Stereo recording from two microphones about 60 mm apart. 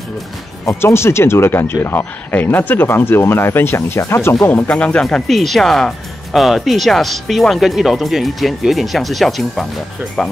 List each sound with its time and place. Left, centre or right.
0.7 s speech: left
4.6 s speech: left
5.3 s speech: centre